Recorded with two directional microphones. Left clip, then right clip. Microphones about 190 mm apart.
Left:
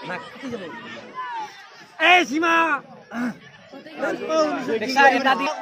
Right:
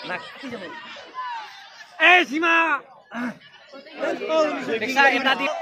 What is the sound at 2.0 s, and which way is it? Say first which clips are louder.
A man's voice: even; 60° left (ahead or behind).